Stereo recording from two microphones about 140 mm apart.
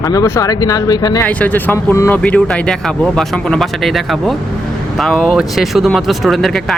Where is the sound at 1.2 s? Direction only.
10° left (ahead or behind).